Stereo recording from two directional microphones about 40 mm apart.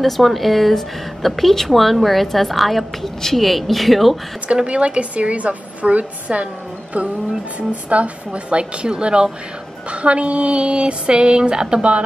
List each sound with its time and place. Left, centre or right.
0.0 s a woman's voice: centre
4.6 s a woman's voice: right
7.7 s a sound: right